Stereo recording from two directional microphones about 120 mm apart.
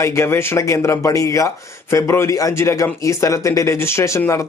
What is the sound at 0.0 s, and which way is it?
Speech, 25° left (ahead or behind).